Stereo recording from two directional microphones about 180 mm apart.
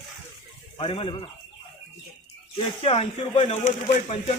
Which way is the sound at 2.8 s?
35° left (ahead or behind).